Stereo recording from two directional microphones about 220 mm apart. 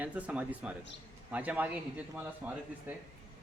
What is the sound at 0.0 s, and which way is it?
Speech, 5° right (ahead or behind).